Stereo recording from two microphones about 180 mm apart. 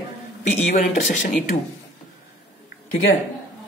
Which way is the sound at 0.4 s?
40° left (ahead or behind).